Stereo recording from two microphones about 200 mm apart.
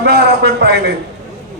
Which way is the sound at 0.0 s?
55° right (ahead or behind).